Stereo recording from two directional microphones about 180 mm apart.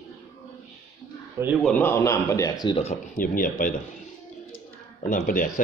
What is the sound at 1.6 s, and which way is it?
A man's voice, 5° left (ahead or behind).